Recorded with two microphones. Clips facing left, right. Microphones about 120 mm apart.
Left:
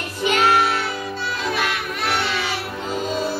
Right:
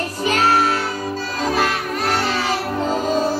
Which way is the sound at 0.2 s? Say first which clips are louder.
Even; 40° right (ahead or behind).